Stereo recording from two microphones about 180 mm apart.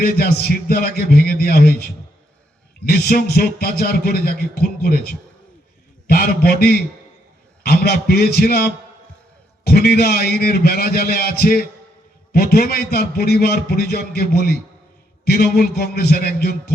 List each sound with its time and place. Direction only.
0.0 s a man's voice: 60° left (ahead or behind)